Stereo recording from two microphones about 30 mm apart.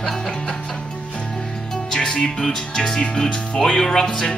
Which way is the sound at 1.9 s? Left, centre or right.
Left.